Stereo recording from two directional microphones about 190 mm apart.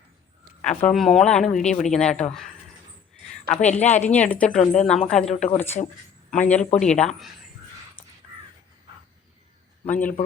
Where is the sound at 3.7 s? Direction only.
35° left (ahead or behind).